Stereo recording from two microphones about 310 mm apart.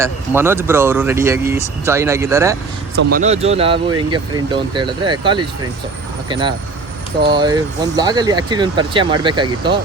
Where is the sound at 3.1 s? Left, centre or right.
Right.